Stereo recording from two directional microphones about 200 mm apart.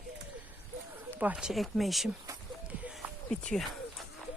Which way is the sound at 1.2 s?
5° right (ahead or behind).